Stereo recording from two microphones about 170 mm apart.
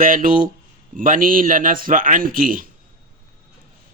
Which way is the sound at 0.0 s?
55° right (ahead or behind).